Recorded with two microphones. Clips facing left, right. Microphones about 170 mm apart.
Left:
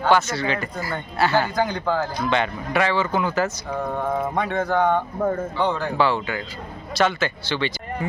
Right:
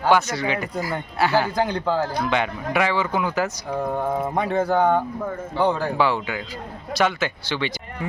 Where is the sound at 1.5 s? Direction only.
30° right (ahead or behind).